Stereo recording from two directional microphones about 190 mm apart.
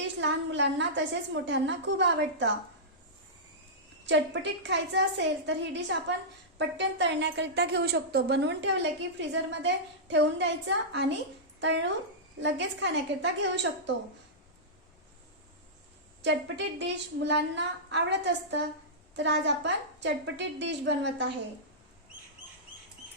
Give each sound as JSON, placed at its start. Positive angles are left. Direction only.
{"t": 0.0, "sound": "a woman's voice", "side_deg": -70}
{"t": 4.0, "sound": "a woman's voice", "side_deg": -70}
{"t": 16.2, "sound": "a woman's voice", "side_deg": -70}